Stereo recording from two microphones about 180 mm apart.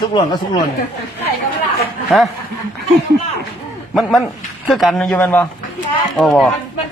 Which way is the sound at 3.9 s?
Centre (ahead or behind).